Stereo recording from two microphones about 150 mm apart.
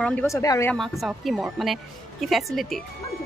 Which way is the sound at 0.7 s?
Centre (ahead or behind).